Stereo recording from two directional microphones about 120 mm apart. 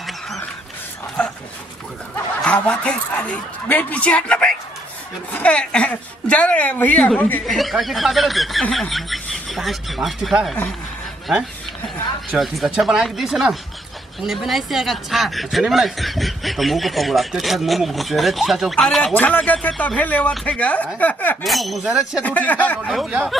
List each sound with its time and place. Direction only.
2.4 s speech: 10° left (ahead or behind)
7.4 s a man's voice: centre (ahead or behind)
21.4 s a man's voice: centre (ahead or behind)
22.2 s speech: 15° left (ahead or behind)
22.8 s a man's voice: centre (ahead or behind)